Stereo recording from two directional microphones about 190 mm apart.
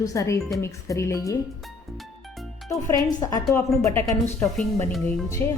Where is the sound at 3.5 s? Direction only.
10° left (ahead or behind).